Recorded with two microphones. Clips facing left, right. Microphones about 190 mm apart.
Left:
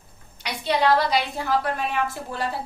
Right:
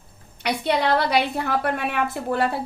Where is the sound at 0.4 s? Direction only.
60° right (ahead or behind).